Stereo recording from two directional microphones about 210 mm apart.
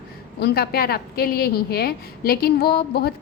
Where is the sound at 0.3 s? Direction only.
50° left (ahead or behind).